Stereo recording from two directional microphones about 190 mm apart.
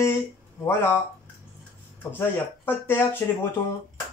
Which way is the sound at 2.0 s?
10° left (ahead or behind).